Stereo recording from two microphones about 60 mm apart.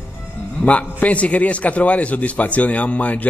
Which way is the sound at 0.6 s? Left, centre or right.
Left.